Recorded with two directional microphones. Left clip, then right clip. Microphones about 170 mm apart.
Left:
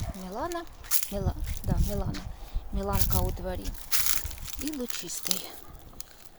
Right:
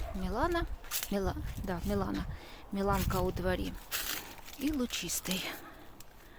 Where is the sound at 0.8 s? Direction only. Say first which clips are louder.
Left 5 dB; 65° left (ahead or behind).